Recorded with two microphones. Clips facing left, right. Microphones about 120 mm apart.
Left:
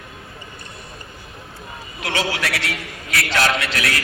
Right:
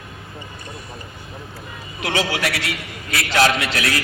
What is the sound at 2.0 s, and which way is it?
Speech, 25° right (ahead or behind).